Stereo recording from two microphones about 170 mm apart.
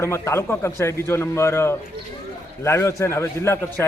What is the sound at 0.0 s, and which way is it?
A man's voice, 15° left (ahead or behind).